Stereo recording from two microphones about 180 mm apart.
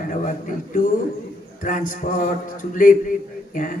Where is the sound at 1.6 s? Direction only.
50° left (ahead or behind).